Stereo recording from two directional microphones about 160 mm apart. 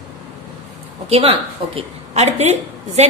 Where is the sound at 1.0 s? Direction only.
40° right (ahead or behind).